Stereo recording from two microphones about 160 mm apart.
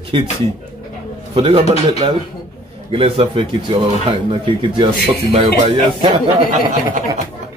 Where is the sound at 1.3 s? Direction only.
35° right (ahead or behind).